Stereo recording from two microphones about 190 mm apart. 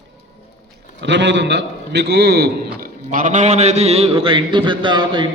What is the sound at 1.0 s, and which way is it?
A man's voice, 70° right (ahead or behind).